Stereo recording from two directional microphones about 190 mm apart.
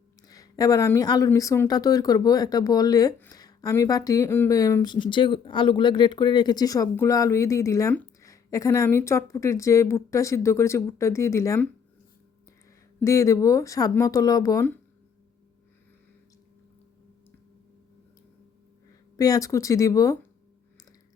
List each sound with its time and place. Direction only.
0.3 s speech: 20° left (ahead or behind)
13.0 s speech: 15° left (ahead or behind)
19.1 s speech: 20° left (ahead or behind)